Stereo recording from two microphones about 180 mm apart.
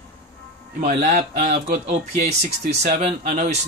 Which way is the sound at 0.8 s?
40° right (ahead or behind).